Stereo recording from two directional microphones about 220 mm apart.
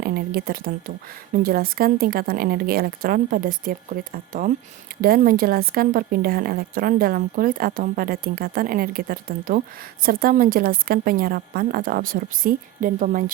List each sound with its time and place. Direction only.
0.0 s a woman's voice: 45° right (ahead or behind)